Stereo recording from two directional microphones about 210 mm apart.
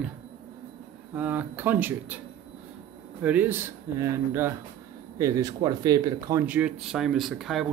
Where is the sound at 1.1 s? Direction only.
10° right (ahead or behind).